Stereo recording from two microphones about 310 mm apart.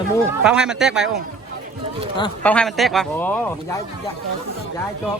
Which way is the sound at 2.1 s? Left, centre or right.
Centre.